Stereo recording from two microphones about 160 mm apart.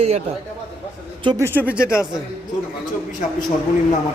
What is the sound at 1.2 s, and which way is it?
Speech, 30° right (ahead or behind).